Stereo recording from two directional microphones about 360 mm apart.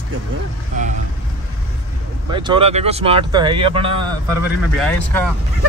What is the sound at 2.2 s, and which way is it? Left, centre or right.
Speech, centre.